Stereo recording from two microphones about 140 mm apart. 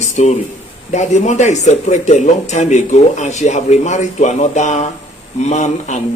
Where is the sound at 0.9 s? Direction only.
55° left (ahead or behind).